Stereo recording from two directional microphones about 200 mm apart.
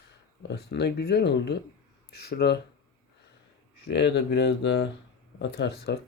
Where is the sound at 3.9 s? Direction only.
60° left (ahead or behind).